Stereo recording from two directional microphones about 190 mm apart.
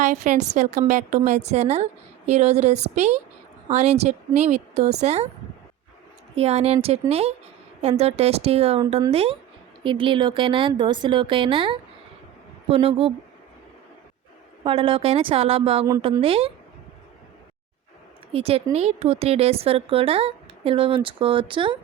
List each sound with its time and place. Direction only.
0.0 s a woman's voice: 40° right (ahead or behind)
6.3 s a woman's voice: 35° right (ahead or behind)
14.6 s a woman's voice: 30° right (ahead or behind)
18.3 s a woman's voice: 30° right (ahead or behind)